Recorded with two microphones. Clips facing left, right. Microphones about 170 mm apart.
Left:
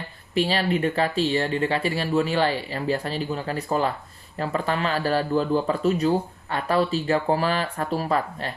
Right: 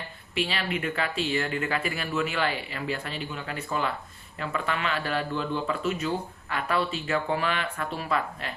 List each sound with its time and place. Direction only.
0.3 s a man's voice: 35° left (ahead or behind)